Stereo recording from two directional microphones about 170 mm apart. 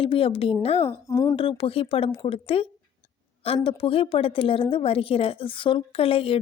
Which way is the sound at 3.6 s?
30° left (ahead or behind).